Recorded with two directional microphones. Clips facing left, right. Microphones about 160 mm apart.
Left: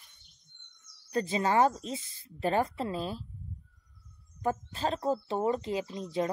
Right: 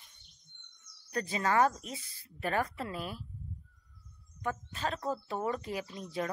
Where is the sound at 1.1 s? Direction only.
25° left (ahead or behind).